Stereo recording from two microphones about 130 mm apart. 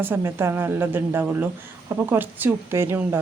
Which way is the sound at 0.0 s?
15° right (ahead or behind).